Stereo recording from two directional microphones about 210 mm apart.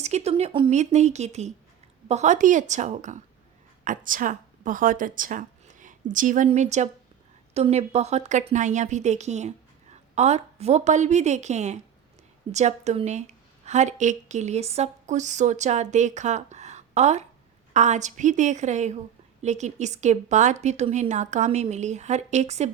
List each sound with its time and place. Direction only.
0.0 s a woman's voice: 30° right (ahead or behind)